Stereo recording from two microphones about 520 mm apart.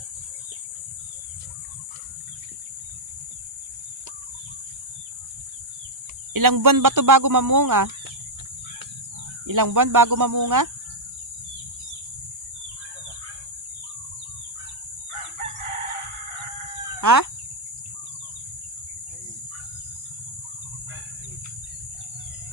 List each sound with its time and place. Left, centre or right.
6.3 s speech: right
9.5 s speech: right
15.1 s chicken: right
17.0 s speech: right